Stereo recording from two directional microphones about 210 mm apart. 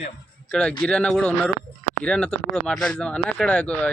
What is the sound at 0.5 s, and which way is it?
Speech, 5° left (ahead or behind).